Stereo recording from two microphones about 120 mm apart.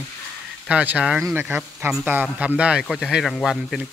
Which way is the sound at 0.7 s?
10° right (ahead or behind).